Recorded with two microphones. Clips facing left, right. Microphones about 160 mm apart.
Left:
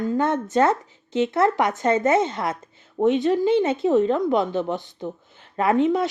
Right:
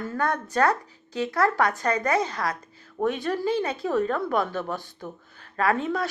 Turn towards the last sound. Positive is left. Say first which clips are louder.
# left 5 dB
turn(degrees=20)  # may be behind; listen again after turning